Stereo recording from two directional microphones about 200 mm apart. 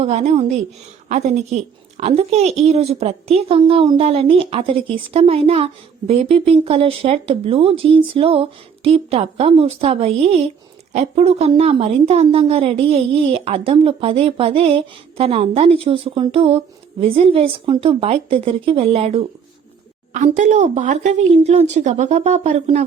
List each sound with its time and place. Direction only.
0.0 s a woman's voice: 35° right (ahead or behind)